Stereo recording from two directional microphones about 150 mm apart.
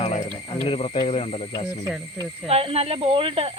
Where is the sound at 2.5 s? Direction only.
40° right (ahead or behind).